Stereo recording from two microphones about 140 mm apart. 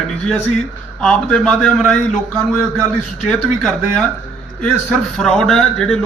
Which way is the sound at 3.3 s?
5° left (ahead or behind).